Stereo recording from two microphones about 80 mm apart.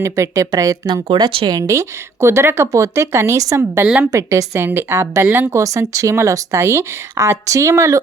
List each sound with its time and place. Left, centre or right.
0.0 s speech: right